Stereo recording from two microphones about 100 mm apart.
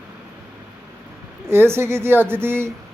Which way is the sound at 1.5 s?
25° right (ahead or behind).